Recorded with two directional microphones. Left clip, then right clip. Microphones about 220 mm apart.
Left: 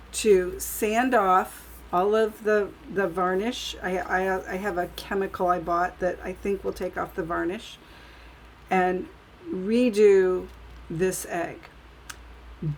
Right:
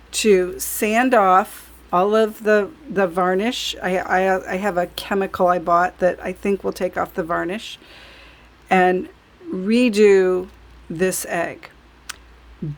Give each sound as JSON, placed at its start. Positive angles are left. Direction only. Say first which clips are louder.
{"t": 0.1, "sound": "speech", "louder": "right 5 dB", "side_deg": -45}